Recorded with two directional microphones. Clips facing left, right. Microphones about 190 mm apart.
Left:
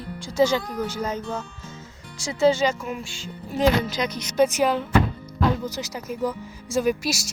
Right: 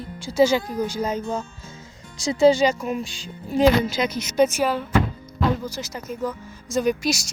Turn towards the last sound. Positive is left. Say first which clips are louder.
# right 1 dB
turn(degrees=5)  # may be behind; listen again after turning